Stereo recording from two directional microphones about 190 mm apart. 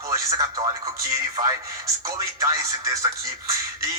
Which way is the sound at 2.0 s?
20° right (ahead or behind).